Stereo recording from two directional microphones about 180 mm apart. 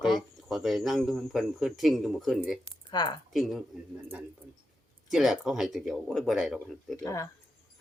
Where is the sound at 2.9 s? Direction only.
25° left (ahead or behind).